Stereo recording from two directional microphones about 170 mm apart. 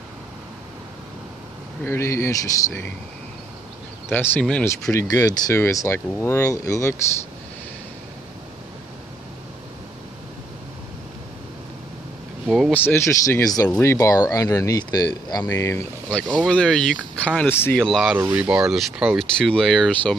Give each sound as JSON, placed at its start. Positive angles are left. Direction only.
{"t": 1.9, "sound": "speech", "side_deg": 15}
{"t": 4.1, "sound": "speech", "side_deg": 10}
{"t": 4.9, "sound": "speech", "side_deg": 20}
{"t": 12.4, "sound": "speech", "side_deg": -5}
{"t": 12.7, "sound": "speech", "side_deg": 15}
{"t": 16.3, "sound": "speech", "side_deg": 5}
{"t": 17.8, "sound": "speech", "side_deg": 0}